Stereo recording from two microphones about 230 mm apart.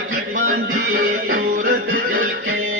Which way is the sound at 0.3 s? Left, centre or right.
Right.